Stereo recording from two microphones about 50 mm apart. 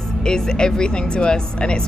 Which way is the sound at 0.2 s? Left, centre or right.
Centre.